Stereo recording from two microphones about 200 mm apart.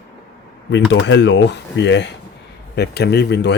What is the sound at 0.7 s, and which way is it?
Speech, 65° left (ahead or behind).